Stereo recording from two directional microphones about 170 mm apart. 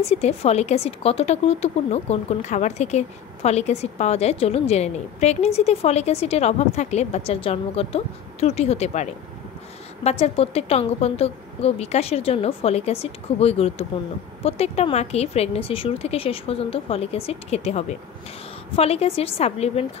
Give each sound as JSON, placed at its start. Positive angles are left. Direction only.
{"t": 0.0, "sound": "speech", "side_deg": 40}